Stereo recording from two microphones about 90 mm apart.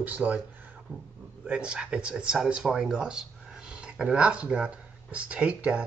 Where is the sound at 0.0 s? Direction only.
20° right (ahead or behind).